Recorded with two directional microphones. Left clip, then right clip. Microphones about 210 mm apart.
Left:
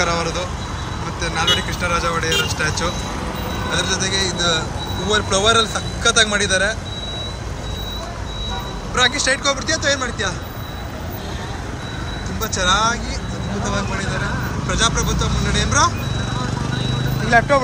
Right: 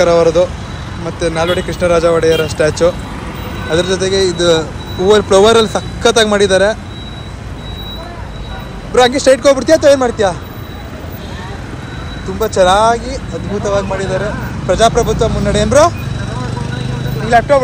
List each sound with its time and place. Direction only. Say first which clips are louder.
0.0 s speech: right 11 dB; centre (ahead or behind)
8.9 s speech: right 9 dB; 5° right (ahead or behind)
12.4 s speech: right 9 dB; 5° right (ahead or behind)
17.3 s speech: right 5 dB; 15° left (ahead or behind)